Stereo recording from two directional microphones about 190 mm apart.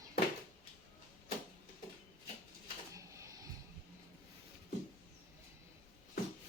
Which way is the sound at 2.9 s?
15° right (ahead or behind).